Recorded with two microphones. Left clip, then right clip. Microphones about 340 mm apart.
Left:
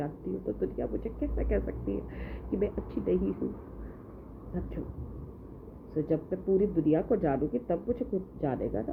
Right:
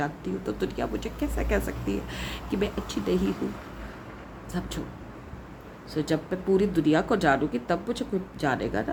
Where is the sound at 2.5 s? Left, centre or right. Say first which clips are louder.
Right 2 dB; right.